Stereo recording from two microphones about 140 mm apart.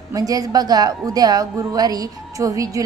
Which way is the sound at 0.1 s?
25° right (ahead or behind).